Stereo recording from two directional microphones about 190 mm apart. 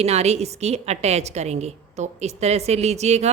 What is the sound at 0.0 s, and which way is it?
Speech, 35° right (ahead or behind).